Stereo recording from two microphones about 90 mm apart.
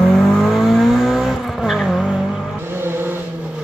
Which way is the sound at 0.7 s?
5° right (ahead or behind).